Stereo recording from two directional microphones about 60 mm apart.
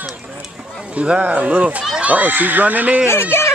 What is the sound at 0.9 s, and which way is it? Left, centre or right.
Speech, right.